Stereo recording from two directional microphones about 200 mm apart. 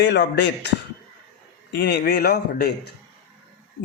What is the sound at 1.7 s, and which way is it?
Speech, 55° left (ahead or behind).